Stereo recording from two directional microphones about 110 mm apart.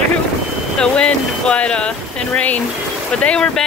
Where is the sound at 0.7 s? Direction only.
10° left (ahead or behind).